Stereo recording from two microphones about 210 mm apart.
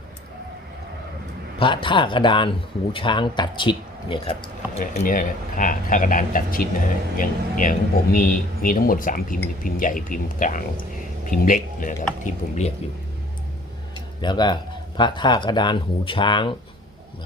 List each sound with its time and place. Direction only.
1.5 s speech: 25° left (ahead or behind)
5.0 s speech: 40° left (ahead or behind)
13.9 s speech: 20° left (ahead or behind)